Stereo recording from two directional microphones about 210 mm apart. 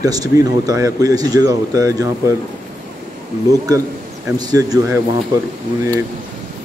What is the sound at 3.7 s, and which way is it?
Speech, 20° right (ahead or behind).